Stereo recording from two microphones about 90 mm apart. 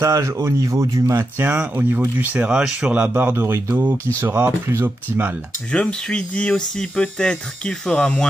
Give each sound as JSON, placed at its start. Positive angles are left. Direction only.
{"t": 0.0, "sound": "speech", "side_deg": -30}
{"t": 1.1, "sound": "speech", "side_deg": -15}
{"t": 3.1, "sound": "speech", "side_deg": -25}
{"t": 5.7, "sound": "speech", "side_deg": 10}